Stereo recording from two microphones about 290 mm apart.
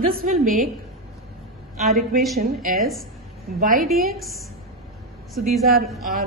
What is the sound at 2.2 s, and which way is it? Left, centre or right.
A woman's voice, centre.